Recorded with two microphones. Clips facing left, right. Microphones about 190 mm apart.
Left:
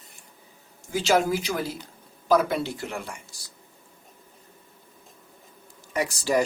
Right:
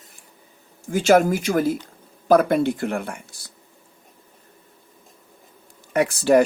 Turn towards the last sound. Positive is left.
turn(degrees=-60)  # may be behind; listen again after turning